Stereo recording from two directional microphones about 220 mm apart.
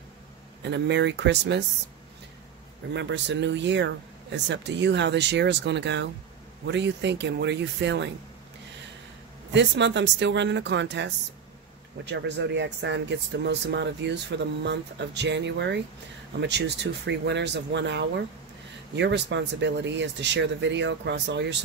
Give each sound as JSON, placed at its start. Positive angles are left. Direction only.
{"t": 0.6, "sound": "speech", "side_deg": -50}
{"t": 2.9, "sound": "speech", "side_deg": -55}
{"t": 9.5, "sound": "speech", "side_deg": -55}